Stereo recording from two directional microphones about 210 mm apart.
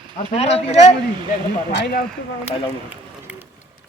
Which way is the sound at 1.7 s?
50° left (ahead or behind).